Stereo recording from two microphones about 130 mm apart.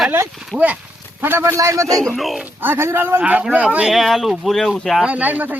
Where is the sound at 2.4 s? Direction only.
15° right (ahead or behind); by 5.0 s 5° left (ahead or behind).